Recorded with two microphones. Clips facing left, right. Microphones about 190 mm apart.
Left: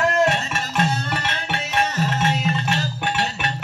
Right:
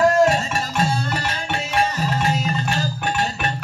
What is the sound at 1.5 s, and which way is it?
Music, 35° right (ahead or behind).